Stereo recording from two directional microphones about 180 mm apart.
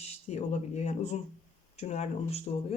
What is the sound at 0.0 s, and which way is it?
Speech, 35° left (ahead or behind).